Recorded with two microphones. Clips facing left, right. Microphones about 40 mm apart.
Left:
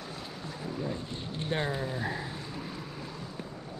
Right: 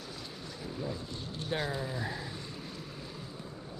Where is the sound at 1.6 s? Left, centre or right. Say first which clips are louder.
Left 3 dB; centre.